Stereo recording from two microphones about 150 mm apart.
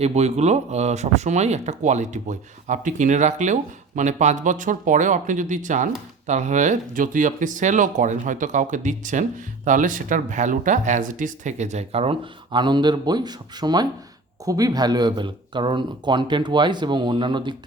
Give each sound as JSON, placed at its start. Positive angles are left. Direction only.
{"t": 0.0, "sound": "speech", "side_deg": -45}